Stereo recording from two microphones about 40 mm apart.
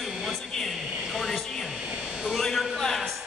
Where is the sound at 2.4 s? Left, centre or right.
Centre.